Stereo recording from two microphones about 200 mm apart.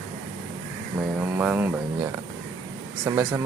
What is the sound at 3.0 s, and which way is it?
Mantra, 15° right (ahead or behind).